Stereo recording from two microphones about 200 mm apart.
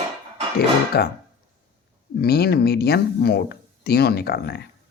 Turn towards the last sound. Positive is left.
turn(degrees=55)  # may be behind; listen again after turning